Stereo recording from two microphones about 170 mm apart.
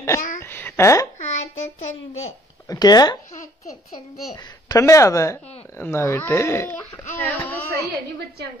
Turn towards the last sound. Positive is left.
turn(degrees=10)  # may be behind; listen again after turning